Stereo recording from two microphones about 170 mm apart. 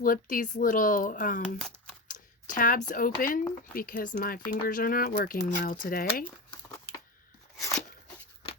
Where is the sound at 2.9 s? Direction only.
55° left (ahead or behind).